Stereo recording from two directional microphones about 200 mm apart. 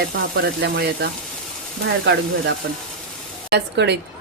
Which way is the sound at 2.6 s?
55° right (ahead or behind).